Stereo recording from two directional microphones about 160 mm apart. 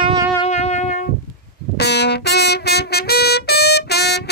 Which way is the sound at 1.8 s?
90° left.